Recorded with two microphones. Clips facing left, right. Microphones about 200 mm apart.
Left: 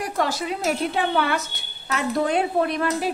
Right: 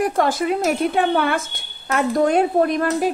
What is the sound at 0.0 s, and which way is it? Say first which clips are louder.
A woman's voice: right 6 dB; 50° right (ahead or behind).